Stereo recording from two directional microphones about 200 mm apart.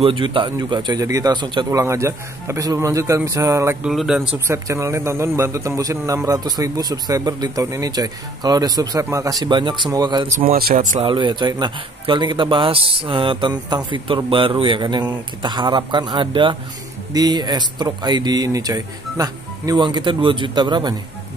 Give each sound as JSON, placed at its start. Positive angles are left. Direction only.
{"t": 0.0, "sound": "speech", "side_deg": -25}
{"t": 3.9, "sound": "speech", "side_deg": 0}
{"t": 4.5, "sound": "a man's voice", "side_deg": -15}
{"t": 10.2, "sound": "speech", "side_deg": -40}
{"t": 11.1, "sound": "a man's voice", "side_deg": -25}